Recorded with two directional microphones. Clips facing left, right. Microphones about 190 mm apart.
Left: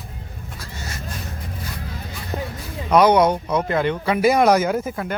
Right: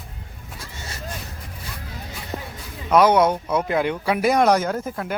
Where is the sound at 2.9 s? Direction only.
5° right (ahead or behind).